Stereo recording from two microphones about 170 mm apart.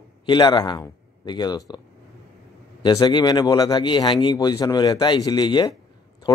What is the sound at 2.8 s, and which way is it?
Speech, 25° left (ahead or behind).